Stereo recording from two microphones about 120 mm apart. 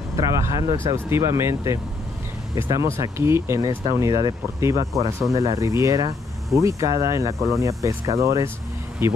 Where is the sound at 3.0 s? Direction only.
20° right (ahead or behind).